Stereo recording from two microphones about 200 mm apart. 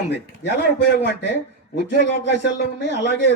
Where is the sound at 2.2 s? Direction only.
60° left (ahead or behind).